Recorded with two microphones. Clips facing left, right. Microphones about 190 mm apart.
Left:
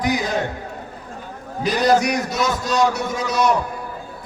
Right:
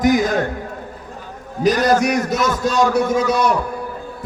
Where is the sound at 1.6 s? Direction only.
45° right (ahead or behind).